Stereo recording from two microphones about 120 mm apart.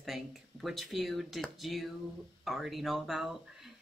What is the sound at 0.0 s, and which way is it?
Speech, centre (ahead or behind).